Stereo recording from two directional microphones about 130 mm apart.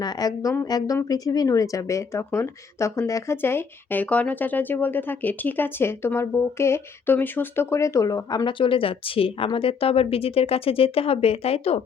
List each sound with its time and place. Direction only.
0.0 s speech: 30° left (ahead or behind)
8.4 s speech: 40° left (ahead or behind)